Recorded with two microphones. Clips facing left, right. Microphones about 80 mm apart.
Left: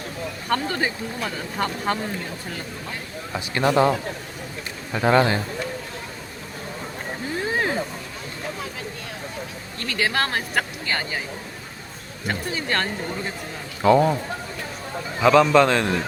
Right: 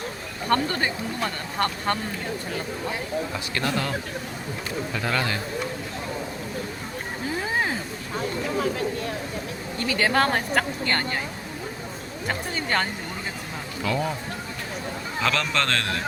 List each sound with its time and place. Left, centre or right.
0.4 s speech: centre
3.3 s speech: left
4.9 s speech: left
7.4 s a sound: centre
9.7 s speech: centre
12.3 s speech: centre
13.8 s speech: left
15.2 s a man's voice: centre